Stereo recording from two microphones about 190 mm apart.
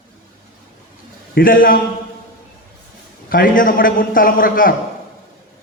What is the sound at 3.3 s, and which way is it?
A man's voice, 45° left (ahead or behind).